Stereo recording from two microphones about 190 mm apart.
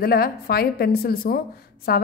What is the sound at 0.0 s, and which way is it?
A woman's voice, 55° left (ahead or behind).